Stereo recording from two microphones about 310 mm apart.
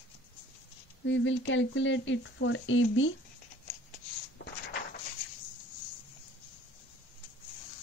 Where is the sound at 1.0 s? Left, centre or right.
Left.